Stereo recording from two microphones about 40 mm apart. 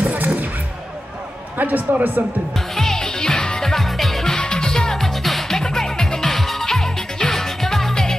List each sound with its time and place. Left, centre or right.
0.0 s music: right
1.6 s a man's voice: right
2.7 s music: centre
4.4 s music: centre
5.6 s music: centre